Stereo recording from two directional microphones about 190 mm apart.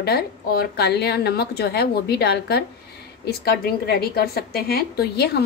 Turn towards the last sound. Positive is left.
turn(degrees=60)  # may be behind; listen again after turning